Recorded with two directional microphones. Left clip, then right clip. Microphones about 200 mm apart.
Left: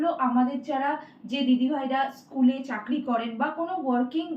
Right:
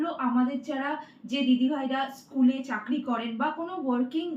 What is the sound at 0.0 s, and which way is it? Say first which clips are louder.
A woman's voice: left 4 dB; 15° right (ahead or behind).